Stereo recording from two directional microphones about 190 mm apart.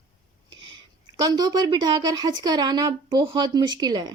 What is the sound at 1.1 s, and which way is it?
Speech, 20° right (ahead or behind).